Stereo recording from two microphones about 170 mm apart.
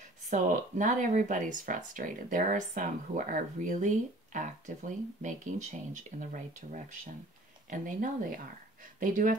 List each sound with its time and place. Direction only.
0.3 s speech: 50° right (ahead or behind)